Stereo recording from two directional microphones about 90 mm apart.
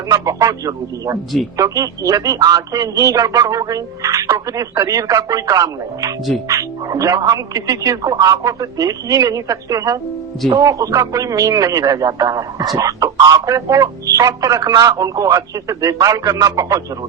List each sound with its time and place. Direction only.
0.1 s a man's voice: 40° right (ahead or behind)